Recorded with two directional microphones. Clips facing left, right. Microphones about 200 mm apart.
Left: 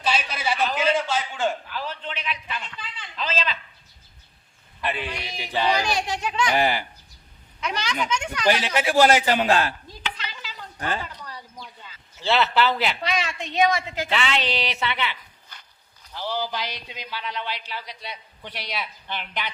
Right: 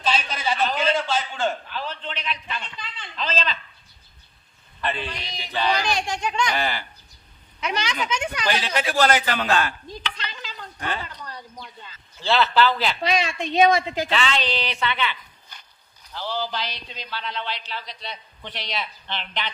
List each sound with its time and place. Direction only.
0.0 s a sound: 10° left (ahead or behind)
4.8 s a man's voice: 10° left (ahead or behind)
7.6 s a woman's voice: 20° right (ahead or behind)
8.4 s a man's voice: 15° left (ahead or behind); by 9.7 s 30° left (ahead or behind)
9.9 s a sound: 5° left (ahead or behind)
12.2 s a man's voice: 20° left (ahead or behind)
13.1 s a woman's voice: 20° right (ahead or behind)
14.1 s a man's voice: 20° left (ahead or behind)
16.1 s a man's voice: 15° left (ahead or behind)